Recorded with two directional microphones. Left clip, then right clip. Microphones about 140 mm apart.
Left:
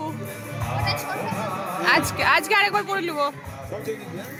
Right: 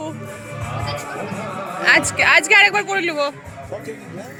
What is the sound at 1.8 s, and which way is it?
Speech, centre (ahead or behind).